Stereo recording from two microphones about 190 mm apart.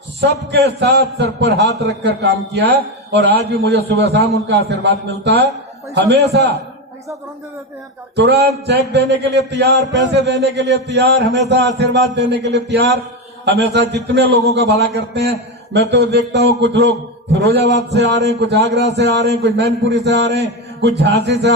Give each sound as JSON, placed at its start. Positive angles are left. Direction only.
{"t": 0.2, "sound": "a man's voice", "side_deg": -65}
{"t": 8.1, "sound": "a man's voice", "side_deg": -65}